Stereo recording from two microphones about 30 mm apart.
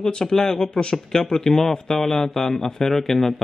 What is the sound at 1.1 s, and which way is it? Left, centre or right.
A man's voice, centre.